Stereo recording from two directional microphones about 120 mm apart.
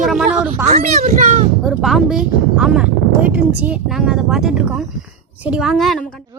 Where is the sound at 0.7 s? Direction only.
80° right.